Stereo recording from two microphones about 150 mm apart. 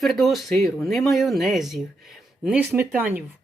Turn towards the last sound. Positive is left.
turn(degrees=-15)  # may be behind; listen again after turning